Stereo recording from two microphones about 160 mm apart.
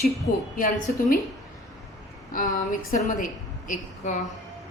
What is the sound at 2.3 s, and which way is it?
A woman's voice, 55° left (ahead or behind).